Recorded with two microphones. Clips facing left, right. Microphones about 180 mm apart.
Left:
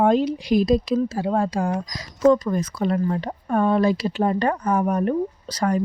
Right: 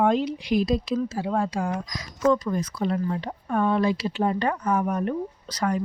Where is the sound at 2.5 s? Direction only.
50° left (ahead or behind).